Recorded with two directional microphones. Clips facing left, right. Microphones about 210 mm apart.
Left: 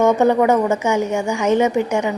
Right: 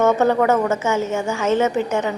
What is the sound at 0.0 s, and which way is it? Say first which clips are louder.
A woman's voice: left 2 dB; 15° left (ahead or behind).